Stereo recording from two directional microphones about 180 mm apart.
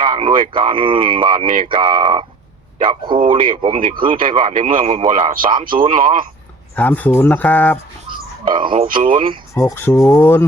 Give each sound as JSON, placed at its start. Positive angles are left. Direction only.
{"t": 0.0, "sound": "a man's voice", "side_deg": -35}
{"t": 1.3, "sound": "speech", "side_deg": -45}
{"t": 1.6, "sound": "a man's voice", "side_deg": -30}
{"t": 3.8, "sound": "speech", "side_deg": -50}
{"t": 4.2, "sound": "speech", "side_deg": -40}
{"t": 6.7, "sound": "speech", "side_deg": 10}
{"t": 8.4, "sound": "a man's voice", "side_deg": -25}
{"t": 9.6, "sound": "speech", "side_deg": 15}